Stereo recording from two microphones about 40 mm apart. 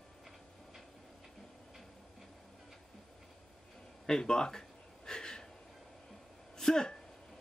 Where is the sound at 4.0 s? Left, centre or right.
Centre.